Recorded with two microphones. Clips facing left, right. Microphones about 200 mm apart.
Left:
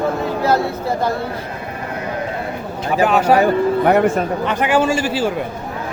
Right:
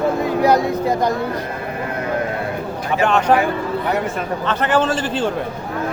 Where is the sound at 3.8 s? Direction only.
55° left (ahead or behind).